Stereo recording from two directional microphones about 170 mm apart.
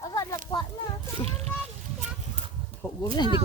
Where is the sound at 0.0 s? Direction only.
20° left (ahead or behind).